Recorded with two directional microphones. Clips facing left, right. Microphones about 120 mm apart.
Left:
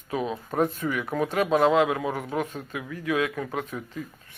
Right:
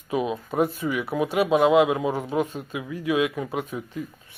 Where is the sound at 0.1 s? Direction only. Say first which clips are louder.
Right 3 dB; 15° right (ahead or behind).